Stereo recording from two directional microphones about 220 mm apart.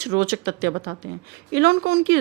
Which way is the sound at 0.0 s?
50° right (ahead or behind).